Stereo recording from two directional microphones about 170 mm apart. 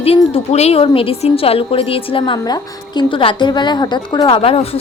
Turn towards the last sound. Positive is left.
turn(degrees=35)  # may be behind; listen again after turning